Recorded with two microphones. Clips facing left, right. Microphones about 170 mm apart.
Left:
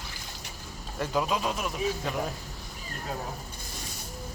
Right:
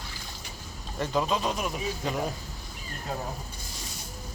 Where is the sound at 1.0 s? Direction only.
5° left (ahead or behind).